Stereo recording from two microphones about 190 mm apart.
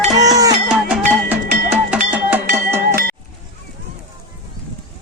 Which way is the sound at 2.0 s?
10° right (ahead or behind).